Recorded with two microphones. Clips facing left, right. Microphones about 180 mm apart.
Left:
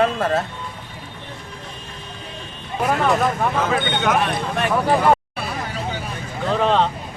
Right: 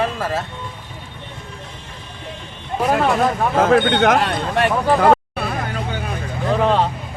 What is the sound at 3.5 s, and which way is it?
Speech, 55° right (ahead or behind).